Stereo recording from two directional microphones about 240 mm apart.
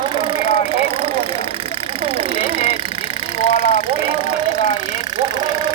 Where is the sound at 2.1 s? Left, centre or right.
Right.